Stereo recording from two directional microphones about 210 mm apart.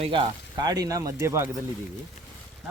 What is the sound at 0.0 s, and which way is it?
Speech, 25° right (ahead or behind).